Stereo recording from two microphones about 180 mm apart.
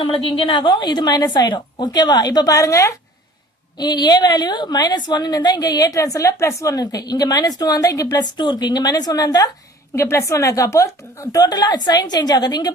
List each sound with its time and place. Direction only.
0.0 s a woman's voice: 30° left (ahead or behind)